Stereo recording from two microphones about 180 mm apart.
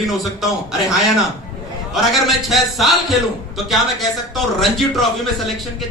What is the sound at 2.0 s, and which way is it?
Speech, centre (ahead or behind).